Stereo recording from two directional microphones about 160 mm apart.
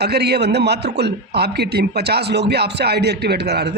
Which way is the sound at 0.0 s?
90° right.